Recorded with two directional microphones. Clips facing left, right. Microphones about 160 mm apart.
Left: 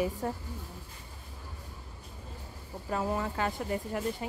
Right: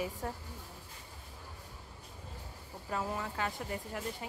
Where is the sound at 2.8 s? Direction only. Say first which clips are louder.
Left 5 dB; 45° left (ahead or behind).